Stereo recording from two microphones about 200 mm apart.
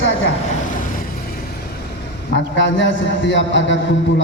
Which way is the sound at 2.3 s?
65° left (ahead or behind).